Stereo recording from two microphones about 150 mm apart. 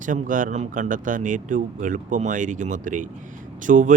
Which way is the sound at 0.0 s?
60° right (ahead or behind).